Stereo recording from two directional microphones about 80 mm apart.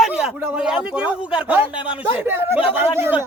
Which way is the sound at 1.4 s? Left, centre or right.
Right.